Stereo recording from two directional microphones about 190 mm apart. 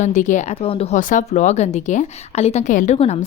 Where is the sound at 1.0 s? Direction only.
40° left (ahead or behind).